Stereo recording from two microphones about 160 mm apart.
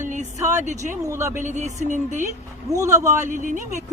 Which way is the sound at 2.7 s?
20° right (ahead or behind).